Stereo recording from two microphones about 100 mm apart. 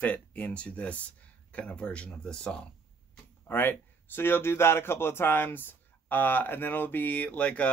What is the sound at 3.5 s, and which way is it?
Speech, 20° left (ahead or behind).